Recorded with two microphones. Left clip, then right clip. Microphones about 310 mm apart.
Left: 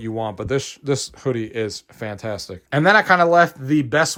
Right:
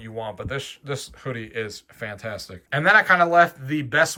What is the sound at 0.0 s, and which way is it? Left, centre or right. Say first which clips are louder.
Speech: left 6 dB; centre.